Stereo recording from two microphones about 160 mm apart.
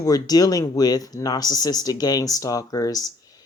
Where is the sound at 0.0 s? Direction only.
25° left (ahead or behind).